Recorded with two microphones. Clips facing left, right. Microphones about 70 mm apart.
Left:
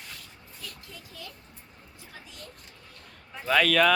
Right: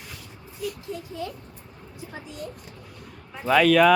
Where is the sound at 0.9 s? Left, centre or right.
Right.